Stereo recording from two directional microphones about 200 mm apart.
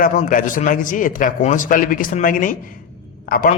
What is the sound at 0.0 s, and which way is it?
A man's voice, 40° left (ahead or behind).